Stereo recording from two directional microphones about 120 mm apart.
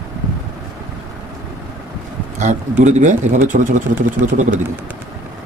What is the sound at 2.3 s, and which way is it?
Speech, 80° right.